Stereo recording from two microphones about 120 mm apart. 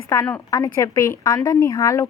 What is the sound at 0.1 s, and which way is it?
A woman's voice, 25° left (ahead or behind).